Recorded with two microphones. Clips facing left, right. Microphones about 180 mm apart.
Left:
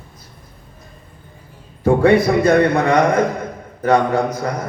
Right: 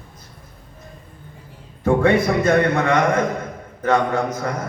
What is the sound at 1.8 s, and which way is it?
Mantra, 35° left (ahead or behind).